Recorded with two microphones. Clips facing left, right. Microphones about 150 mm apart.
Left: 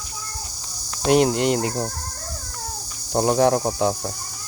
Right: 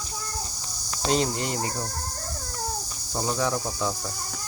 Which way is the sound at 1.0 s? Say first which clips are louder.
Left 8 dB; 65° left (ahead or behind).